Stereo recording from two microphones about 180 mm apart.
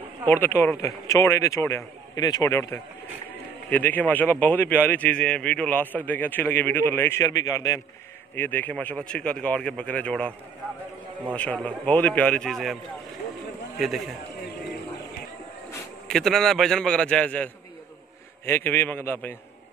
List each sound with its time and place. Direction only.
0.3 s a man's voice: 10° left (ahead or behind)
11.3 s a man's voice: 10° left (ahead or behind)
13.7 s a man's voice: centre (ahead or behind)
16.1 s a man's voice: centre (ahead or behind)